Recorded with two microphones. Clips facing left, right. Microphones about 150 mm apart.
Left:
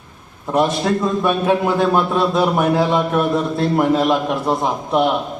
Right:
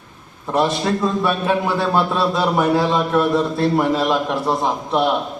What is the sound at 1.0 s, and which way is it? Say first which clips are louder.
A man's voice: left 2 dB; 20° left (ahead or behind).